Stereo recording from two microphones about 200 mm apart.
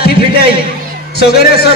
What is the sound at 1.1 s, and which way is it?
Speech, 55° left (ahead or behind).